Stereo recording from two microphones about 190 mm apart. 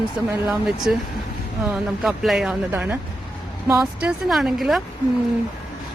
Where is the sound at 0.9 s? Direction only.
5° right (ahead or behind).